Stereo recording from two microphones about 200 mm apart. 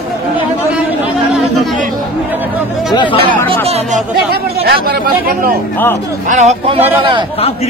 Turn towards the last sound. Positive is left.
turn(degrees=-25)  # may be behind; listen again after turning